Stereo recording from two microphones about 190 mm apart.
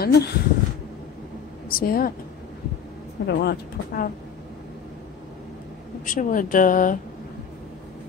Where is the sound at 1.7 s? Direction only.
50° left (ahead or behind).